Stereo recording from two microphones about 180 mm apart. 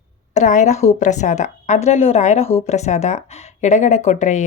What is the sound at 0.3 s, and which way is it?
Speech, 40° left (ahead or behind).